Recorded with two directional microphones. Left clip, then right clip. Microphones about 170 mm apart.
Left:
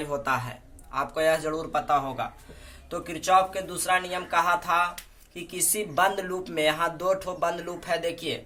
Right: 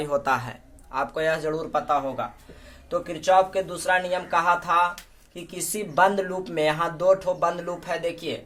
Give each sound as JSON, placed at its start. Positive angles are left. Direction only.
{"t": 0.0, "sound": "speech", "side_deg": -40}